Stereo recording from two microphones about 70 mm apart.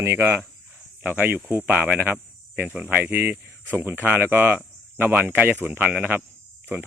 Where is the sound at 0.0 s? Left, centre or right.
Right.